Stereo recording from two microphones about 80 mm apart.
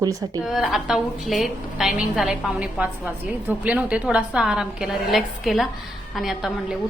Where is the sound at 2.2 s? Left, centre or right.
Centre.